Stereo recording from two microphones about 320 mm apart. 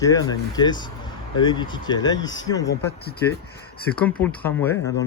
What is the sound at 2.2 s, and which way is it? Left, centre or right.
Speech, left.